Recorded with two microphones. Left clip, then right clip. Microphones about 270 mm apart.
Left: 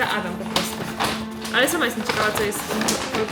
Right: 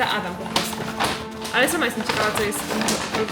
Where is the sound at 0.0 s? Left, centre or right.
Centre.